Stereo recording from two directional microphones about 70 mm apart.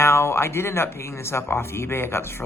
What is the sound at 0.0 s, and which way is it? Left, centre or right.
Speech, left.